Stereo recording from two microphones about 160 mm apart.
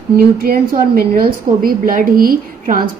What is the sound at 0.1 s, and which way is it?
A woman's voice, 70° right (ahead or behind).